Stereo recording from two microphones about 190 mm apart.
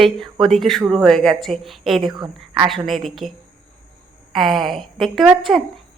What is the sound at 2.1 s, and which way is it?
Speech, 20° right (ahead or behind).